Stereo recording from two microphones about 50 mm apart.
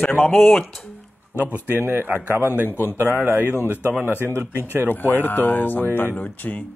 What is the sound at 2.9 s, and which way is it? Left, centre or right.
Speech, right.